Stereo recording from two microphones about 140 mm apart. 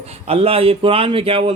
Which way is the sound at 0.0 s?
50° right (ahead or behind).